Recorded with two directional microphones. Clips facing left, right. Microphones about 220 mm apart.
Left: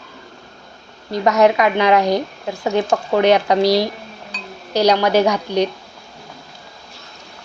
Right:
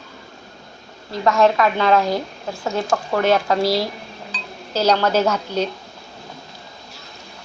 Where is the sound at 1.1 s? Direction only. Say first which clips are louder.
Left 2 dB; 20° left (ahead or behind).